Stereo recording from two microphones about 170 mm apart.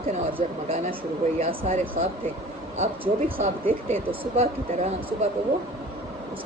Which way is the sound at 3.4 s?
35° right (ahead or behind).